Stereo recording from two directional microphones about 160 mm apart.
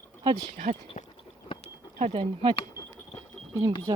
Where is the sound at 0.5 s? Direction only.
45° right (ahead or behind).